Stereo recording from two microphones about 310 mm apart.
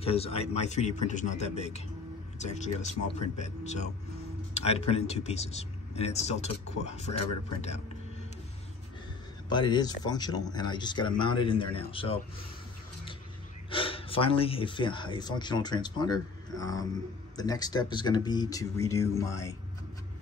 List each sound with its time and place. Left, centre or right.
0.0 s speech: centre
9.5 s speech: centre
13.7 s speech: centre